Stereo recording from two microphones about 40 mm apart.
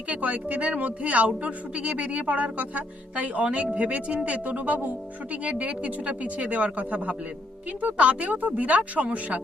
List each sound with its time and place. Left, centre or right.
0.1 s speech: right